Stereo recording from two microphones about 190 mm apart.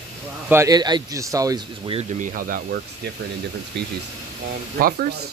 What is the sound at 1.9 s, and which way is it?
Speech, 40° right (ahead or behind).